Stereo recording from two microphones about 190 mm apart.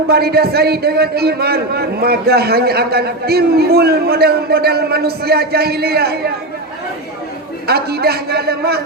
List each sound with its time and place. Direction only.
0.1 s a man's voice: 55° right (ahead or behind)
7.7 s a man's voice: 55° right (ahead or behind)